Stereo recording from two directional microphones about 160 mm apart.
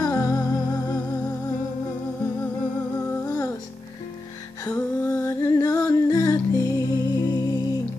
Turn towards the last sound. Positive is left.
turn(degrees=20)  # may be behind; listen again after turning